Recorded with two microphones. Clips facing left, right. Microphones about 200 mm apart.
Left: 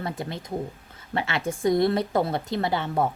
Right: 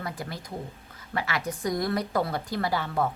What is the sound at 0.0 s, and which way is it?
A woman's voice, 25° left (ahead or behind).